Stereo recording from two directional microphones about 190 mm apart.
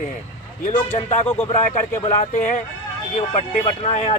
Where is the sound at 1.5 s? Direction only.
40° left (ahead or behind).